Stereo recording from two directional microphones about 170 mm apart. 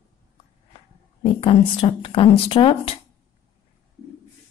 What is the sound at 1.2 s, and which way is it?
A woman's voice, 35° left (ahead or behind).